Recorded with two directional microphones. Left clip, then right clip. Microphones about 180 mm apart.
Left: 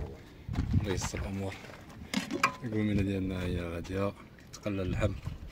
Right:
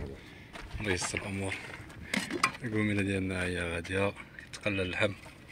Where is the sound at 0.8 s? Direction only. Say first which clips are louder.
Right 7 dB; 5° left (ahead or behind).